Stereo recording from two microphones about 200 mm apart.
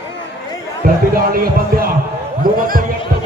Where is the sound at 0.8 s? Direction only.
45° right (ahead or behind).